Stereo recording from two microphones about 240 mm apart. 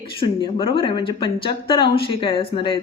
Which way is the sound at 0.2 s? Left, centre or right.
Left.